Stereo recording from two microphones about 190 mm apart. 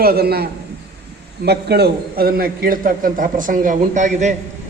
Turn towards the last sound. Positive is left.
turn(degrees=-40)  # may be behind; listen again after turning